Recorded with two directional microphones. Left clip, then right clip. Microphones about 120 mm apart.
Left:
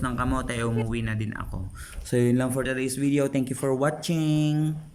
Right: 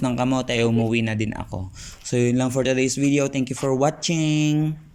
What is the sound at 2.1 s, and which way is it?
Speech, 10° right (ahead or behind).